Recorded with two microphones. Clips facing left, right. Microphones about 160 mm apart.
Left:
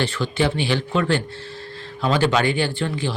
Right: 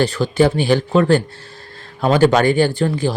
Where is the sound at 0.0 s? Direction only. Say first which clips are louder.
Right 7 dB; 40° right (ahead or behind).